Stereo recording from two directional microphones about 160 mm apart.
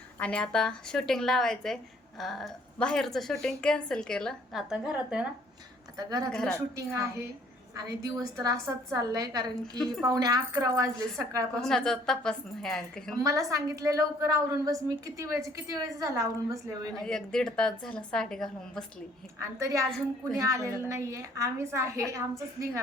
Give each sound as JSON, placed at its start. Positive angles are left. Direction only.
{"t": 0.2, "sound": "a woman's voice", "side_deg": 5}
{"t": 6.0, "sound": "a woman's voice", "side_deg": -25}
{"t": 6.3, "sound": "a woman's voice", "side_deg": 5}
{"t": 6.7, "sound": "a woman's voice", "side_deg": -20}
{"t": 9.7, "sound": "a woman's voice", "side_deg": 5}
{"t": 10.1, "sound": "a woman's voice", "side_deg": -25}
{"t": 11.6, "sound": "a woman's voice", "side_deg": 5}
{"t": 13.1, "sound": "a woman's voice", "side_deg": -20}
{"t": 17.0, "sound": "a woman's voice", "side_deg": 5}
{"t": 19.4, "sound": "a woman's voice", "side_deg": -20}